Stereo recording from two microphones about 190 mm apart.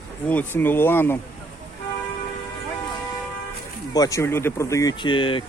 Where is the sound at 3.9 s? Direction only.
20° left (ahead or behind).